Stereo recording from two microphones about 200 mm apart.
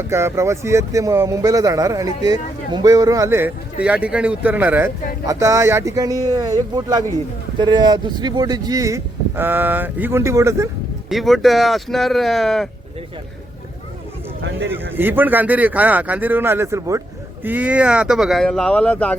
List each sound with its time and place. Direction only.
0.0 s a man's voice: 10° right (ahead or behind)
11.1 s speech: centre (ahead or behind)
14.9 s a man's voice: 10° right (ahead or behind); by 19.1 s 5° left (ahead or behind)